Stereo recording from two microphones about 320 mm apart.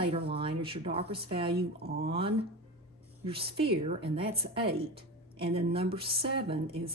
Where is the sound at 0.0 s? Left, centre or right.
Centre.